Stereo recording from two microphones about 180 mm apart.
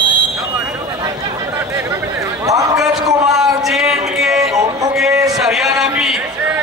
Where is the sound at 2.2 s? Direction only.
20° right (ahead or behind).